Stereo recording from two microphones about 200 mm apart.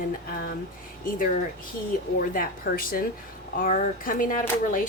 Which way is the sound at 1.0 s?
45° left (ahead or behind).